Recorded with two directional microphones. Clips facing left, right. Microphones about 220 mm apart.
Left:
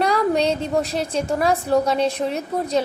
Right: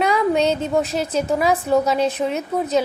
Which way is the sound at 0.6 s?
Centre (ahead or behind).